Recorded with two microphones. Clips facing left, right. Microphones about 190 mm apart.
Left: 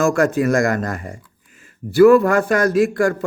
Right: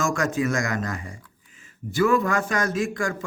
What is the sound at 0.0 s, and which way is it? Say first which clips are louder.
Speech: left 8 dB; 60° left (ahead or behind).